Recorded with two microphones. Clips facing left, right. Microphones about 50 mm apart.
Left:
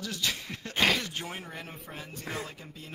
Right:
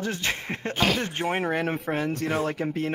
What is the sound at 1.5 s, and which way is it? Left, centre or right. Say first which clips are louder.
Speech: right 16 dB; right.